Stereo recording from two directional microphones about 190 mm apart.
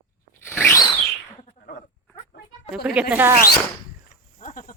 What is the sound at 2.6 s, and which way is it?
Speech, 5° right (ahead or behind).